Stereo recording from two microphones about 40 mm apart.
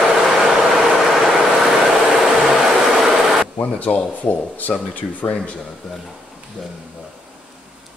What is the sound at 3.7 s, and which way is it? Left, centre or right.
Speech, left.